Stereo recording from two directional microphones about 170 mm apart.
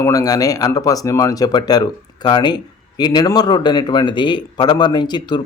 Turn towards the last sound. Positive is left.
turn(degrees=25)  # may be behind; listen again after turning